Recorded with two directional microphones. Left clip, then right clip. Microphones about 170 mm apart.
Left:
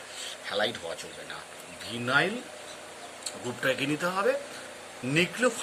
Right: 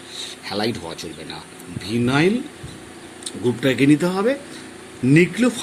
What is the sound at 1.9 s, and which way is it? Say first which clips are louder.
Speech: right 7 dB; 20° right (ahead or behind).